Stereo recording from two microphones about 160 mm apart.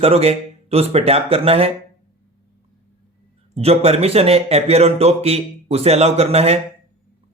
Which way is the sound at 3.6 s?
40° right (ahead or behind).